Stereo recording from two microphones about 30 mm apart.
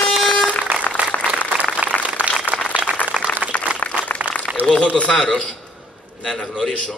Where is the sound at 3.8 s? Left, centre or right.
Left.